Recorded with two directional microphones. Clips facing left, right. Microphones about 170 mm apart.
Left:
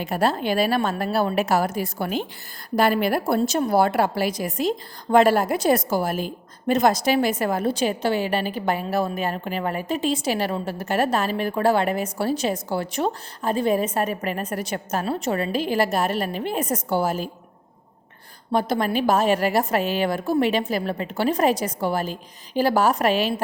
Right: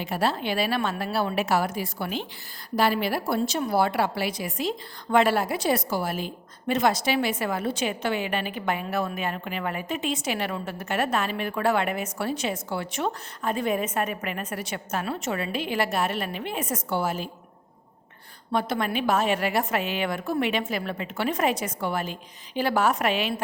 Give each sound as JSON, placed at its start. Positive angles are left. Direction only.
{"t": 0.0, "sound": "a woman's voice", "side_deg": 45}
{"t": 18.5, "sound": "a woman's voice", "side_deg": 35}